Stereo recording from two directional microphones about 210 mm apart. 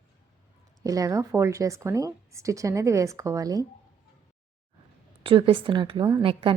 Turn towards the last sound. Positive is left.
turn(degrees=-25)  # may be behind; listen again after turning